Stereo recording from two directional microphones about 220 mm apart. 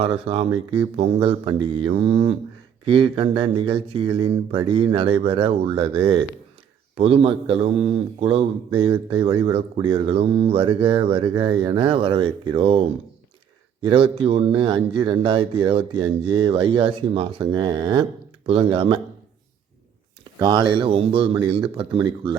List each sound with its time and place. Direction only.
0.0 s a man's voice: 25° right (ahead or behind)
13.8 s a man's voice: 25° right (ahead or behind)
20.4 s a man's voice: 20° right (ahead or behind)